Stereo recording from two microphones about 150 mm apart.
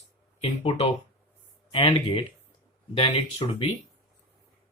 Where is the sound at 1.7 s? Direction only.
35° left (ahead or behind).